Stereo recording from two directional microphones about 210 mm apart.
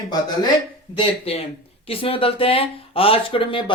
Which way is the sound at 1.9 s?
25° left (ahead or behind).